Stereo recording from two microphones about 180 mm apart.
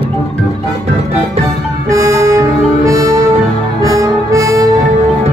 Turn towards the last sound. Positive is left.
turn(degrees=-20)  # may be behind; listen again after turning